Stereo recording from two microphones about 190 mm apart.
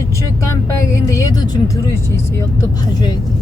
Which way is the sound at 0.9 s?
15° left (ahead or behind).